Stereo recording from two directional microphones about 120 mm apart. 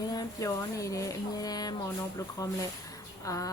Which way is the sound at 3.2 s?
30° left (ahead or behind).